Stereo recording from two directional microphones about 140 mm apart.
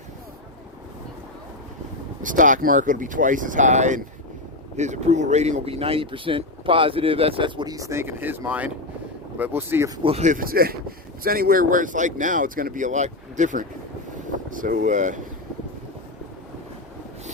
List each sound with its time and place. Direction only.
2.2 s speech: 70° right (ahead or behind); by 9.9 s 15° right (ahead or behind)
10.0 s speech: 40° right (ahead or behind)
10.2 s speech: 85° right; by 15.2 s 65° right (ahead or behind)